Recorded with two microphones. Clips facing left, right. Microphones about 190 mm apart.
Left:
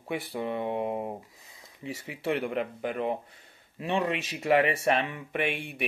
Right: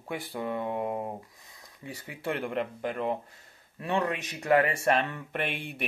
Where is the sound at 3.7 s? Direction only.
20° left (ahead or behind).